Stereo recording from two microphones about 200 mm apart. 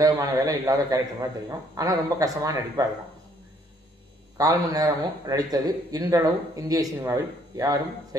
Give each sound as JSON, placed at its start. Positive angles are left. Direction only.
{"t": 0.0, "sound": "speech", "side_deg": -20}
{"t": 4.4, "sound": "speech", "side_deg": -20}